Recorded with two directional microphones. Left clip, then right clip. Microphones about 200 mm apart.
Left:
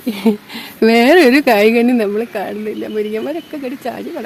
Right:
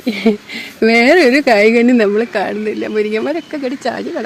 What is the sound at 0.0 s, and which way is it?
Speech, centre (ahead or behind).